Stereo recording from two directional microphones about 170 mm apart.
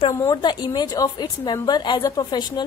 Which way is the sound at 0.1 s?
20° left (ahead or behind).